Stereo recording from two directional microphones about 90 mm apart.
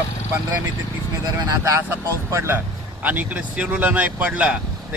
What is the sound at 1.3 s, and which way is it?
Speech, 35° right (ahead or behind).